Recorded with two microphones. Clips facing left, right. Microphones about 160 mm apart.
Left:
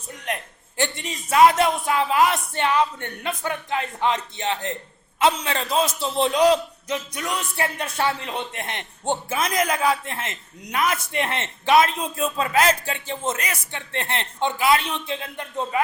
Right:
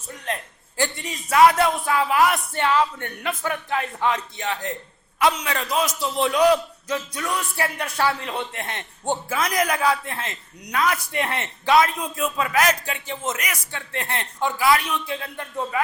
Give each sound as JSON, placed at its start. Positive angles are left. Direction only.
{"t": 0.3, "sound": "a man's voice", "side_deg": 15}